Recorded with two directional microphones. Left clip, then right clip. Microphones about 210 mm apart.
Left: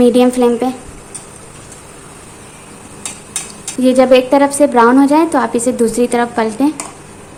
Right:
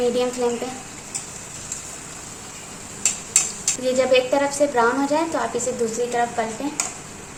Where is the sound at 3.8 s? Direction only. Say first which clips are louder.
Left 9 dB; 30° left (ahead or behind).